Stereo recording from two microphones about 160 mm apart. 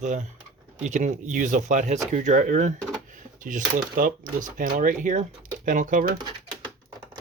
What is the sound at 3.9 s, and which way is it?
Speech, 55° right (ahead or behind).